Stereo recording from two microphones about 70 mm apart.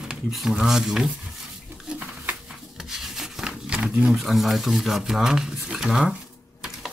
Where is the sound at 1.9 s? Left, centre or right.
Right.